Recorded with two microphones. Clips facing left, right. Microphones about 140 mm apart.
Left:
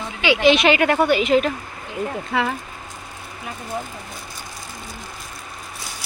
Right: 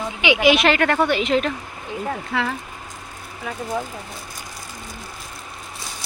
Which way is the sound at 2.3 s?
15° left (ahead or behind).